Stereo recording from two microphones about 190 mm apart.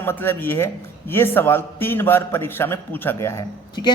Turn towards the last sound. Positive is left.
turn(degrees=20)  # may be behind; listen again after turning